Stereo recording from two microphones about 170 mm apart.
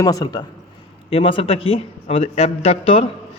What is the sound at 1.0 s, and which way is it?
A man's voice, 35° left (ahead or behind).